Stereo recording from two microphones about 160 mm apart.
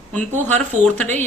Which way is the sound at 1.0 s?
10° left (ahead or behind).